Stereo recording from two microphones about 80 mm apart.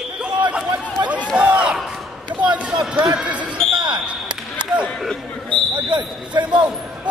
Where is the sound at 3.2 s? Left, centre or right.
Centre.